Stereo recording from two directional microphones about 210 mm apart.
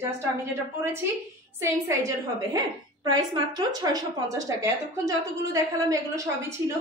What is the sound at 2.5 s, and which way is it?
Speech, 20° right (ahead or behind).